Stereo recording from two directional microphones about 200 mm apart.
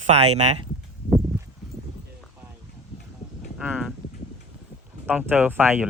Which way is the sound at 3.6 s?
5° right (ahead or behind).